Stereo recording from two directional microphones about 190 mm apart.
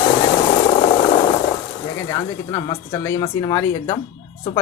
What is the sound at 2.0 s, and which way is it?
Speech, 20° left (ahead or behind).